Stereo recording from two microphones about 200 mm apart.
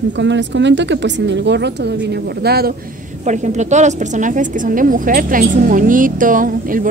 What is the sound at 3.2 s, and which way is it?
A woman's voice, 35° right (ahead or behind).